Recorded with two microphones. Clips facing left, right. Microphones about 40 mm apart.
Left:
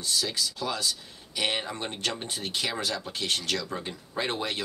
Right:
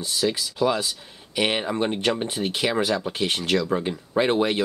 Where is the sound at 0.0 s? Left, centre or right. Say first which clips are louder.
Right 5 dB; centre.